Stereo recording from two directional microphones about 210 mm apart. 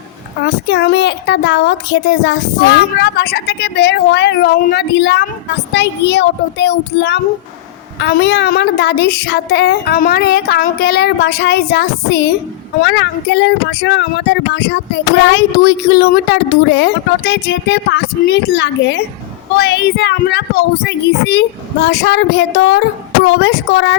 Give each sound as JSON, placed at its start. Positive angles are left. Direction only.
{"t": 0.4, "sound": "a woman's voice", "side_deg": 55}